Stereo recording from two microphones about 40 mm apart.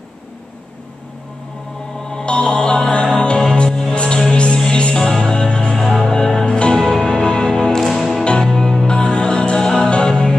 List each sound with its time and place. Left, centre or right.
2.0 s music: left
6.8 s music: centre
7.8 s music: centre
8.2 s music: centre
8.8 s music: left